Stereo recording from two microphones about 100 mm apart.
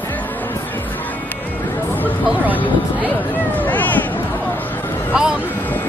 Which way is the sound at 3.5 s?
15° left (ahead or behind).